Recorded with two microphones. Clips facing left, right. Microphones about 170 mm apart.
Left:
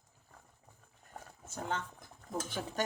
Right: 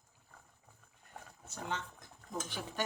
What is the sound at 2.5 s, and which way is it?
Speech, 45° left (ahead or behind).